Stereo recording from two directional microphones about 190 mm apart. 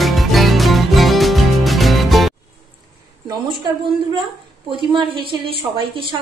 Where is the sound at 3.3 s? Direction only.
25° right (ahead or behind).